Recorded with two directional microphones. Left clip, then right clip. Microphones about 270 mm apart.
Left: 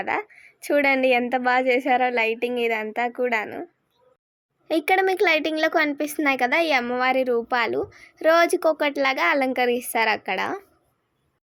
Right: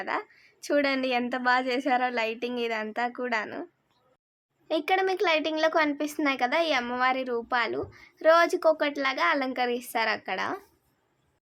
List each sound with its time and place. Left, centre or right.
0.0 s a woman's voice: centre
4.7 s a woman's voice: centre